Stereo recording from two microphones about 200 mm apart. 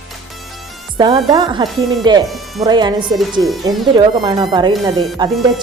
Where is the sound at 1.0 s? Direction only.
20° right (ahead or behind).